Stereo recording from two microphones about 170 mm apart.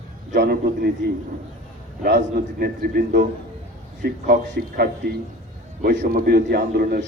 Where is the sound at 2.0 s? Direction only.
75° right (ahead or behind).